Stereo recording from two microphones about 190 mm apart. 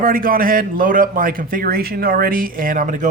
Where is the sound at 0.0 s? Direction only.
50° right (ahead or behind).